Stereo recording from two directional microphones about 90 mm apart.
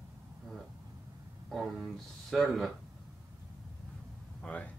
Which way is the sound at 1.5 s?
Centre (ahead or behind).